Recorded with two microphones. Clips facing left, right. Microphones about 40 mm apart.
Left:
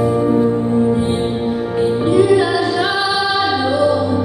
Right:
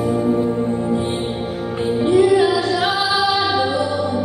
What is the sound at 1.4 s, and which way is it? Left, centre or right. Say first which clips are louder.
Music: left 6 dB; centre.